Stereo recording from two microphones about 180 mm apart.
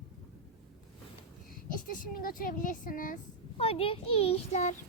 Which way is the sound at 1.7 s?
50° left (ahead or behind).